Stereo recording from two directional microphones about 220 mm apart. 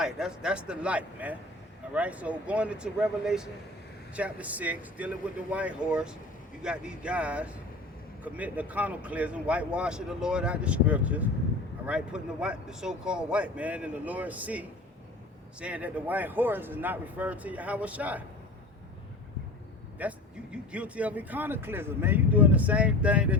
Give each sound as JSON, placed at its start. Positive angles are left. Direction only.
{"t": 0.0, "sound": "speech", "side_deg": -5}
{"t": 20.0, "sound": "speech", "side_deg": -5}